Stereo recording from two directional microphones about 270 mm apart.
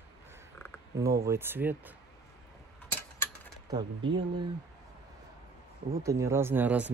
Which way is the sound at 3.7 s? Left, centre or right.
Centre.